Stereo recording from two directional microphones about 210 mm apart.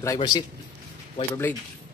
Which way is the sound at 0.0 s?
20° left (ahead or behind).